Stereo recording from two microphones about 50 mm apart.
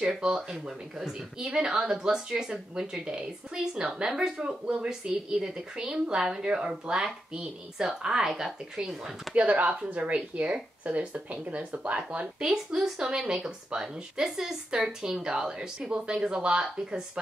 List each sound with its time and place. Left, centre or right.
0.5 s speech: centre
9.3 s speech: right
12.4 s speech: centre